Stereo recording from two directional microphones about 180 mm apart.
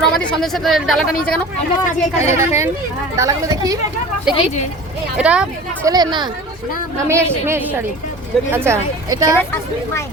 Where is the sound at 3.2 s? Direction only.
15° right (ahead or behind).